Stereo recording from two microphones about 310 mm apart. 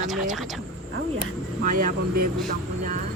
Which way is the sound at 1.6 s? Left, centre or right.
Right.